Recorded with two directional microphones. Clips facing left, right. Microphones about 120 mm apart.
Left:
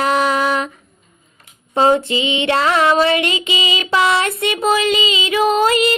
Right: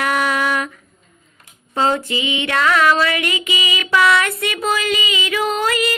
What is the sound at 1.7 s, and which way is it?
Child singing, 25° left (ahead or behind).